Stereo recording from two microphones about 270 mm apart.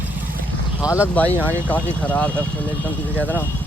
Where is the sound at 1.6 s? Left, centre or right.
Centre.